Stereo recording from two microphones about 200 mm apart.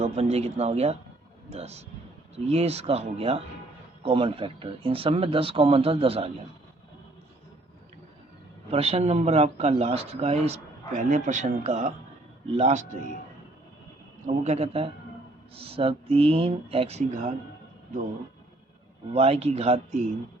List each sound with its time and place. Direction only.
0.0 s speech: 30° right (ahead or behind)
8.7 s speech: 30° right (ahead or behind)
14.4 s speech: 30° right (ahead or behind)
19.1 s speech: 30° right (ahead or behind)